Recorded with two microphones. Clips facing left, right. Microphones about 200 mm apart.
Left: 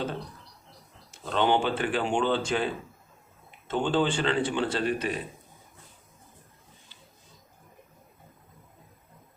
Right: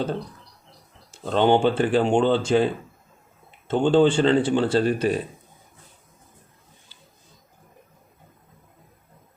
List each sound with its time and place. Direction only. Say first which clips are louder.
1.3 s speech: right 6 dB; 30° right (ahead or behind)
3.7 s speech: right 8 dB; 30° right (ahead or behind)